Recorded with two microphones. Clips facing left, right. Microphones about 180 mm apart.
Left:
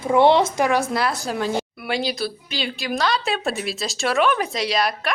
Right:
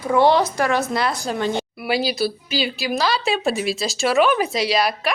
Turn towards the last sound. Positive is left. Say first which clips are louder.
# right 2 dB
turn(degrees=-5)  # may be behind; listen again after turning